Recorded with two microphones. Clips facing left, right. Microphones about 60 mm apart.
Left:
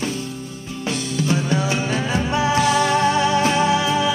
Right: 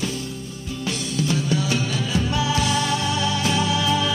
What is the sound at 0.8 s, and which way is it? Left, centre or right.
Music, left.